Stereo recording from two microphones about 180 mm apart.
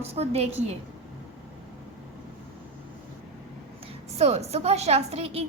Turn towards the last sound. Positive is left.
turn(degrees=-35)  # may be behind; listen again after turning